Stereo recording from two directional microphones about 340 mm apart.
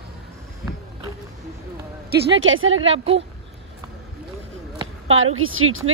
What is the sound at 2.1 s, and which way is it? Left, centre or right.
Speech, right.